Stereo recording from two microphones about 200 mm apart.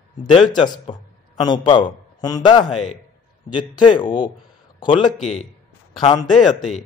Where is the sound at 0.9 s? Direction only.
30° left (ahead or behind).